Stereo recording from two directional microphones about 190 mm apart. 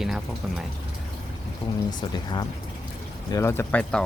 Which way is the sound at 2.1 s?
20° left (ahead or behind).